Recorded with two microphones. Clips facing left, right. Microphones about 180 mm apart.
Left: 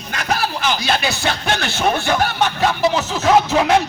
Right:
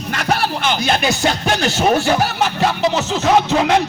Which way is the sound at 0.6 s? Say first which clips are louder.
Right 2 dB; 50° right (ahead or behind).